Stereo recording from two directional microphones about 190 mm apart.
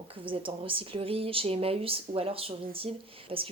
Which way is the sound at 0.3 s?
30° right (ahead or behind).